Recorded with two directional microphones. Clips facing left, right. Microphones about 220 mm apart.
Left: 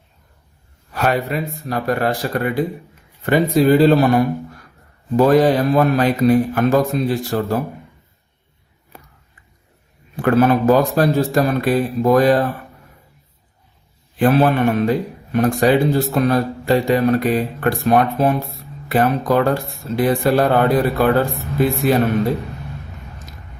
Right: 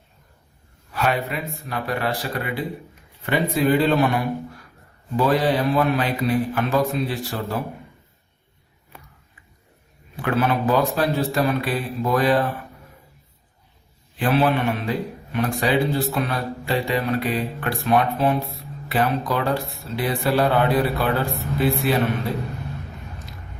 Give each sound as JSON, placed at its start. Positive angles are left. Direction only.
{"t": 0.9, "sound": "a man's voice", "side_deg": 45}
{"t": 10.2, "sound": "a man's voice", "side_deg": 45}
{"t": 14.2, "sound": "a man's voice", "side_deg": 45}